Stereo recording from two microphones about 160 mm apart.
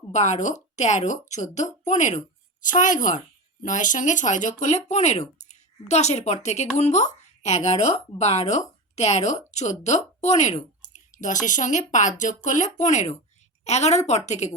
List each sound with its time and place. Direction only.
0.1 s a woman's voice: 45° left (ahead or behind)